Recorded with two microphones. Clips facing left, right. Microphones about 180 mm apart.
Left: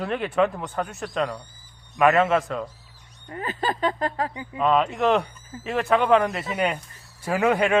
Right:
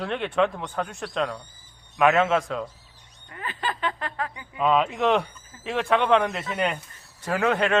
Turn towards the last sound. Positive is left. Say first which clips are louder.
# left 2 dB
turn(degrees=5)  # may be behind; listen again after turning